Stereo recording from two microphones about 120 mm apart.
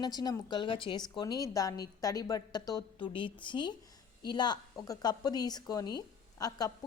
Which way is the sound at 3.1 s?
45° left (ahead or behind).